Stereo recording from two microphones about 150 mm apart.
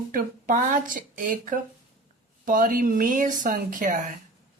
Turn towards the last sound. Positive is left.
turn(degrees=-60)  # may be behind; listen again after turning